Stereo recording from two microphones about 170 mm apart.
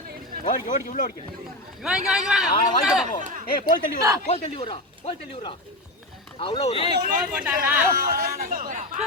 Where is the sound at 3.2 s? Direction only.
50° right (ahead or behind).